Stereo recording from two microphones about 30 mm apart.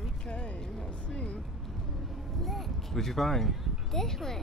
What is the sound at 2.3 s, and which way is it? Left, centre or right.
Speech, centre.